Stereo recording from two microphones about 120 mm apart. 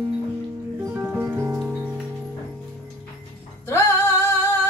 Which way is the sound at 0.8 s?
20° right (ahead or behind).